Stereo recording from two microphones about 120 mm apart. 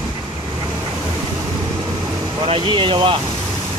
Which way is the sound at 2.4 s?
40° right (ahead or behind).